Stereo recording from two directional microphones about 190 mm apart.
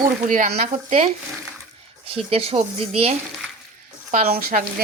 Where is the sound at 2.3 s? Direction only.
30° right (ahead or behind).